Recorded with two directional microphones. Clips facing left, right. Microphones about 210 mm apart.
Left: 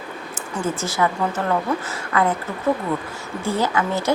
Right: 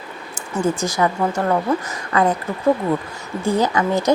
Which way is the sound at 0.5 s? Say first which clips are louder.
Right 4 dB; 15° right (ahead or behind).